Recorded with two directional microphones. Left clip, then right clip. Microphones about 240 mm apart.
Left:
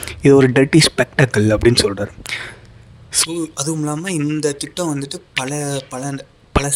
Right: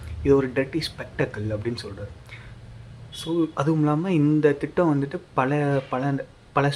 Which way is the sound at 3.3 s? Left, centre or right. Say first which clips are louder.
Even; centre.